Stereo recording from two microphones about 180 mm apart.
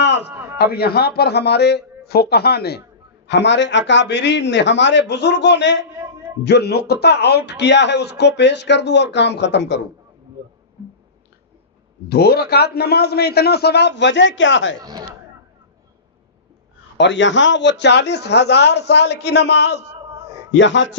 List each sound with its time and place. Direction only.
0.0 s a sound: 75° left (ahead or behind)
0.3 s a sound: 10° right (ahead or behind)
0.7 s a man's voice: 60° left (ahead or behind); by 9.8 s 75° left (ahead or behind)
12.0 s a man's voice: 60° left (ahead or behind); by 14.8 s 90° left
14.8 s speech: 20° right (ahead or behind)
17.0 s speech: 90° left; by 20.0 s 70° left (ahead or behind)
20.5 s a man's voice: 90° left